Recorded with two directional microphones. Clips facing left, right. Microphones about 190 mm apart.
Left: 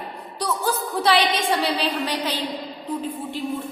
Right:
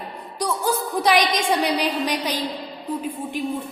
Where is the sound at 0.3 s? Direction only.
10° right (ahead or behind).